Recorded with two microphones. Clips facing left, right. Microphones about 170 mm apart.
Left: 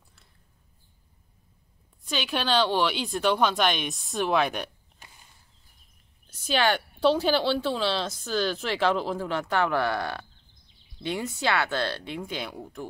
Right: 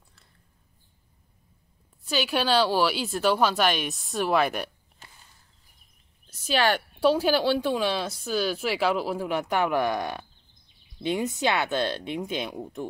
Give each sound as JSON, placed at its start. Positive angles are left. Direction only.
{"t": 2.0, "sound": "speech", "side_deg": -5}
{"t": 6.3, "sound": "speech", "side_deg": -5}